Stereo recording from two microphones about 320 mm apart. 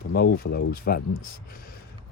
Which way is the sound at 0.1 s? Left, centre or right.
Left.